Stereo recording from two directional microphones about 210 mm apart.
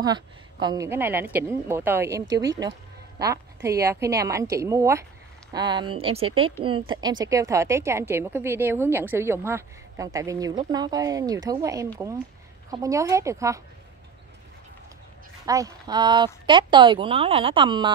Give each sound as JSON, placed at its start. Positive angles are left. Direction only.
{"t": 0.0, "sound": "a woman's voice", "side_deg": -20}
{"t": 15.4, "sound": "a woman's voice", "side_deg": -15}